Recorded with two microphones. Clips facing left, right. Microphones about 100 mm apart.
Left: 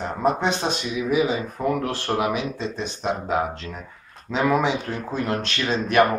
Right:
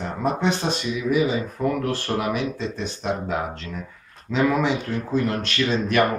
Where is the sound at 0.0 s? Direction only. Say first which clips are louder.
Left 3 dB; 25° left (ahead or behind).